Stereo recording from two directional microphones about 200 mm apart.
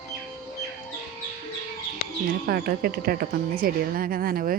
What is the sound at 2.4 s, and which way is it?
Speech, 50° right (ahead or behind).